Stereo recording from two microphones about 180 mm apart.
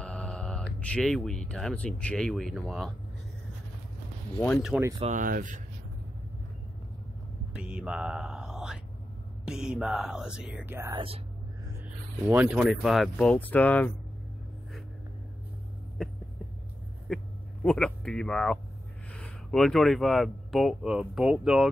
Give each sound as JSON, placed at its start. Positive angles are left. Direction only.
{"t": 0.0, "sound": "mantra", "side_deg": 5}
{"t": 0.7, "sound": "speech", "side_deg": 5}
{"t": 5.0, "sound": "speech", "side_deg": -45}
{"t": 7.5, "sound": "speech", "side_deg": -5}
{"t": 12.3, "sound": "speech", "side_deg": -10}
{"t": 16.0, "sound": "a sound", "side_deg": 5}
{"t": 17.1, "sound": "speech", "side_deg": 0}